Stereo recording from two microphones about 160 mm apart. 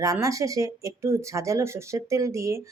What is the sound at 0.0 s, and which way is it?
Speech, 20° right (ahead or behind).